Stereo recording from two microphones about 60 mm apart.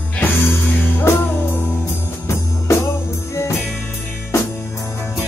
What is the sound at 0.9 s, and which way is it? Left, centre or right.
Music, left.